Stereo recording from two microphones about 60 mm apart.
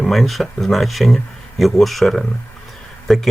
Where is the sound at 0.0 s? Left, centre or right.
Centre.